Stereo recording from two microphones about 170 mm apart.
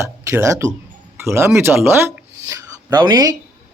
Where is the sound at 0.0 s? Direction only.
15° right (ahead or behind).